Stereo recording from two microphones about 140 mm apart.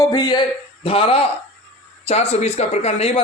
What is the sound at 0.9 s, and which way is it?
Speech, 45° left (ahead or behind).